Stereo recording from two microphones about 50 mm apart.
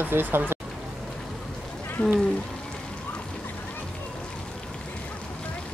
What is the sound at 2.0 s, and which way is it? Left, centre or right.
Speech, left.